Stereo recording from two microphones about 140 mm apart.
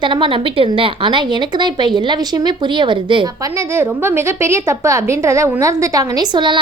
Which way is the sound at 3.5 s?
20° right (ahead or behind).